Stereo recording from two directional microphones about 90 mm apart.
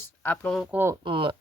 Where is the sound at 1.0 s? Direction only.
65° right (ahead or behind).